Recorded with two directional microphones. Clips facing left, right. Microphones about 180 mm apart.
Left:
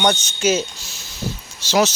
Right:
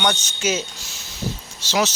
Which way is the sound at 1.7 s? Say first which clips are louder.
Left 4 dB; 40° left (ahead or behind).